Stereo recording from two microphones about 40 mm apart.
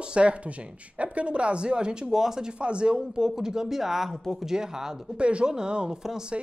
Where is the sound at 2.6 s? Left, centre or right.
Right; by 4.5 s centre.